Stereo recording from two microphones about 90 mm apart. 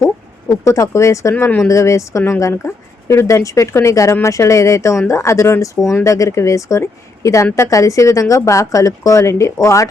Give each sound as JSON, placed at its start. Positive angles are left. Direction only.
{"t": 0.6, "sound": "speech", "side_deg": 35}